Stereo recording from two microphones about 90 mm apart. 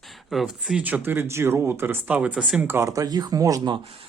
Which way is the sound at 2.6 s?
25° right (ahead or behind).